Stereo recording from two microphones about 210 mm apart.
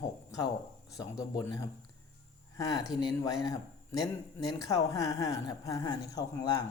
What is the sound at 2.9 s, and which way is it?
Speech, 20° left (ahead or behind).